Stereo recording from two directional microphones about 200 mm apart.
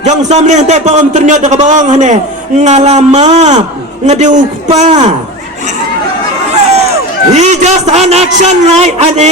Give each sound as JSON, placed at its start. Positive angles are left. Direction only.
{"t": 0.0, "sound": "a man's voice", "side_deg": -35}
{"t": 6.5, "sound": "a sound", "side_deg": -30}
{"t": 7.3, "sound": "a man's voice", "side_deg": -35}